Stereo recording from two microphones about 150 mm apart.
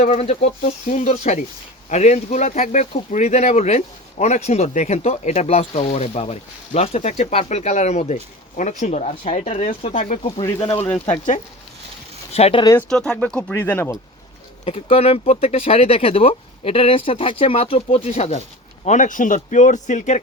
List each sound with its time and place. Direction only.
0.1 s speech: 45° left (ahead or behind)
9.9 s speech: 60° left (ahead or behind)
12.3 s speech: 40° left (ahead or behind)
12.9 s speech: 5° left (ahead or behind)
14.6 s speech: 40° left (ahead or behind)
18.9 s speech: 60° left (ahead or behind)